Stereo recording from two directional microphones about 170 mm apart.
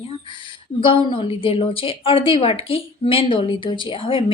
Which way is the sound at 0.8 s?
30° left (ahead or behind).